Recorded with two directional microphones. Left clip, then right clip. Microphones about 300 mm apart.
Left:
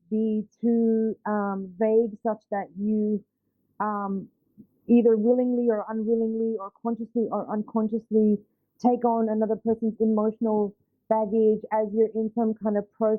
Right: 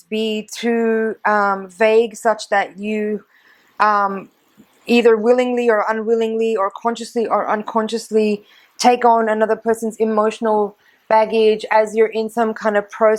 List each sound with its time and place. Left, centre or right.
0.3 s speech: centre
11.2 s speech: centre